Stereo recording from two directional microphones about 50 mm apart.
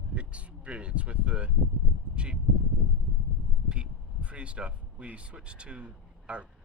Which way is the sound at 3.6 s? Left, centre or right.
Right.